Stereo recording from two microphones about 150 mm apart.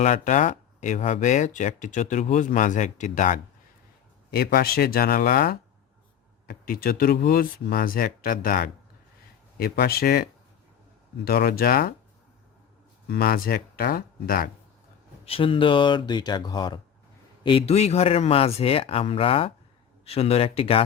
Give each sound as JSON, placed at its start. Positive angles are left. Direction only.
{"t": 0.0, "sound": "speech", "side_deg": 55}
{"t": 4.3, "sound": "speech", "side_deg": 90}
{"t": 9.6, "sound": "speech", "side_deg": 90}
{"t": 11.3, "sound": "speech", "side_deg": 90}
{"t": 13.1, "sound": "speech", "side_deg": 90}
{"t": 15.2, "sound": "speech", "side_deg": 40}
{"t": 17.4, "sound": "speech", "side_deg": 40}